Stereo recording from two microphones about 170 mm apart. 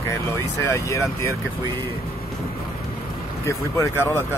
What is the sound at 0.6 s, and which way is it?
Speech, 15° left (ahead or behind).